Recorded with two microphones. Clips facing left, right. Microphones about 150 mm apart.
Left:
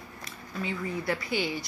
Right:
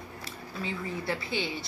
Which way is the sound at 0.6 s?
25° right (ahead or behind).